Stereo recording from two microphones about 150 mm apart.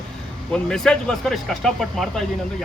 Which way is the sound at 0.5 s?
5° left (ahead or behind).